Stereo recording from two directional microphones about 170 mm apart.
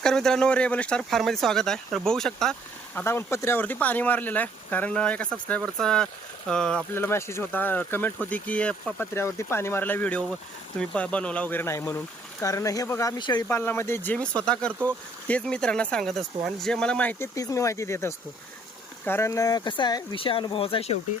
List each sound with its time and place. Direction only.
0.0 s speech: 5° left (ahead or behind); by 13.4 s 25° left (ahead or behind)
13.5 s speech: 15° left (ahead or behind); by 20.9 s 30° left (ahead or behind)